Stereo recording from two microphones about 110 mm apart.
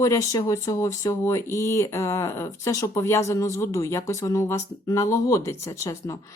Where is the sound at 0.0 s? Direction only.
30° left (ahead or behind).